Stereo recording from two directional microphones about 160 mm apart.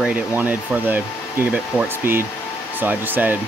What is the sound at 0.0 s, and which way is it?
Speech, 10° right (ahead or behind).